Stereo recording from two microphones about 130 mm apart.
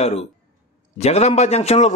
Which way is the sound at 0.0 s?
50° left (ahead or behind).